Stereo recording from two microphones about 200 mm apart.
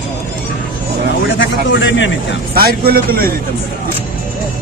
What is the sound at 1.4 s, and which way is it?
Speech, 65° left (ahead or behind).